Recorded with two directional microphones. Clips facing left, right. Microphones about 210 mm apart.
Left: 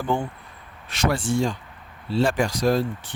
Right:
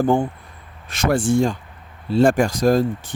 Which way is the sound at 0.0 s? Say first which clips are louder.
Right 7 dB; 45° right (ahead or behind).